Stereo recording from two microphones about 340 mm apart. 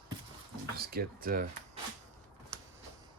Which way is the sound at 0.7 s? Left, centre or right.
Right.